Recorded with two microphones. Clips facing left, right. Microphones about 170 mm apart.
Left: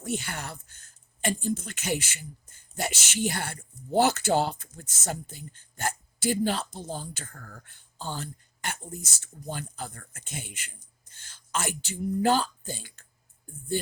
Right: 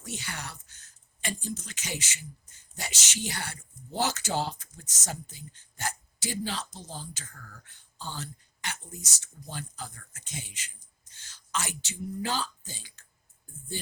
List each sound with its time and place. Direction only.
0.0 s speech: 55° left (ahead or behind)